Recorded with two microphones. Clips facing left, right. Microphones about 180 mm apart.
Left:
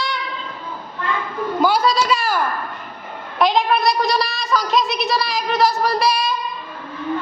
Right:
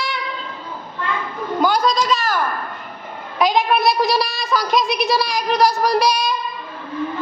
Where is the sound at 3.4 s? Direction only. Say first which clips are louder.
Even; centre (ahead or behind).